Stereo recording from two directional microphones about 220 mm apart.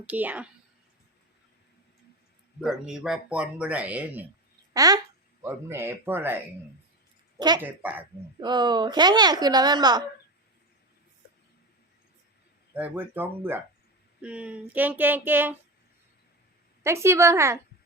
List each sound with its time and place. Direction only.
0.0 s female singing: 5° right (ahead or behind)
2.6 s speech: 5° right (ahead or behind)
5.4 s female singing: 10° right (ahead or behind)
7.3 s speech: 20° right (ahead or behind)
7.6 s female singing: 10° right (ahead or behind)
8.4 s a woman's voice: 20° right (ahead or behind)
12.7 s female singing: 10° right (ahead or behind)
16.8 s female singing: 10° right (ahead or behind)